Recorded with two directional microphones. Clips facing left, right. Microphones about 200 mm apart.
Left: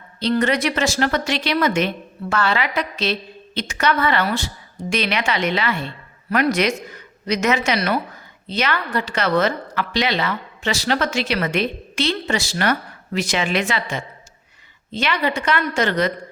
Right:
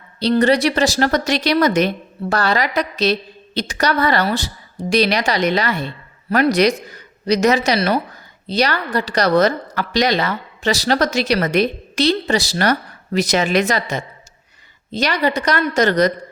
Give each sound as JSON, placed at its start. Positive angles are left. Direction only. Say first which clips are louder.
{"t": 0.2, "sound": "a woman's voice", "louder": "right 4 dB", "side_deg": -35}